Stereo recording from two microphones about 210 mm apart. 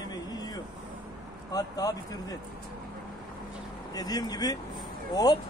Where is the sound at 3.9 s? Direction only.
20° left (ahead or behind).